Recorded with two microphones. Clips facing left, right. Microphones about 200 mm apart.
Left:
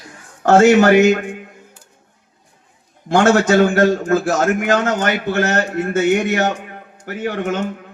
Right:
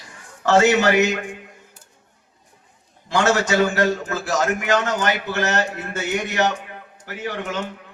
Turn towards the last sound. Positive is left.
turn(degrees=50)  # may be behind; listen again after turning